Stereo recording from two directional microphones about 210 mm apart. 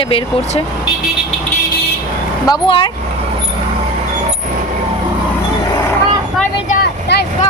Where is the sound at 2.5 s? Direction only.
25° left (ahead or behind).